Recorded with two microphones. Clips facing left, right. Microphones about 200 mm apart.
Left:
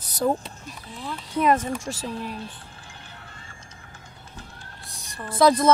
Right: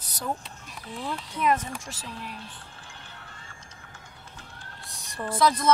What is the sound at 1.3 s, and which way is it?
Speech, 40° left (ahead or behind).